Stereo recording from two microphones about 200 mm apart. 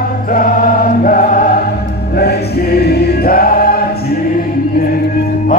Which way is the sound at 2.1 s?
50° left (ahead or behind).